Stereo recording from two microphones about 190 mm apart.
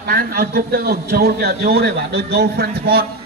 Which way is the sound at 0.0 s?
50° right (ahead or behind).